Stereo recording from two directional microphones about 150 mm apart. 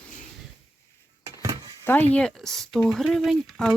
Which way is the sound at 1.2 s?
20° right (ahead or behind).